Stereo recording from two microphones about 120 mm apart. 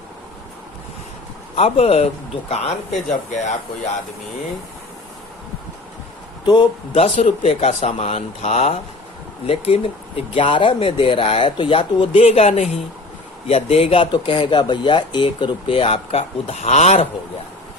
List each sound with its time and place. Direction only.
1.5 s speech: 55° left (ahead or behind); by 3.9 s 80° left
6.4 s a man's voice: 40° left (ahead or behind)
6.9 s speech: 75° left (ahead or behind); by 12.2 s 45° left (ahead or behind)
12.2 s speech: 60° left (ahead or behind)